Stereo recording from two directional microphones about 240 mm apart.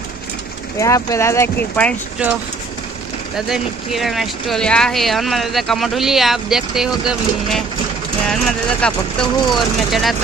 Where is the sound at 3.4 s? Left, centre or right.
Centre.